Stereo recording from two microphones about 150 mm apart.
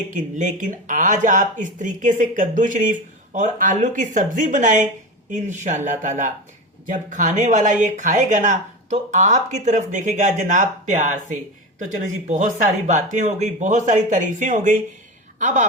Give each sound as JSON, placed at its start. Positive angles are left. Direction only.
{"t": 0.1, "sound": "a woman's voice", "side_deg": -55}